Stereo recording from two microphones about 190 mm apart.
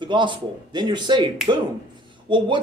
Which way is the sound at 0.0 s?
25° right (ahead or behind).